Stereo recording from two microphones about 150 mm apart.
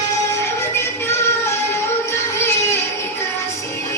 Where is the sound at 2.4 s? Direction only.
15° left (ahead or behind).